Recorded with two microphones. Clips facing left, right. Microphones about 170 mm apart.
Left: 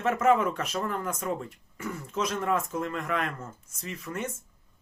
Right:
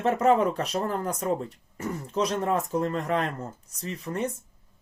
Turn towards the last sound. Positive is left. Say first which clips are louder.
# right 4 dB
turn(degrees=-35)  # may be behind; listen again after turning